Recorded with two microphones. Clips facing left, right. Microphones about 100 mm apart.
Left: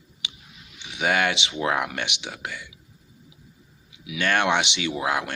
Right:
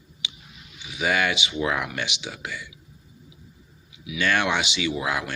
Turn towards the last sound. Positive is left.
turn(degrees=50)  # may be behind; listen again after turning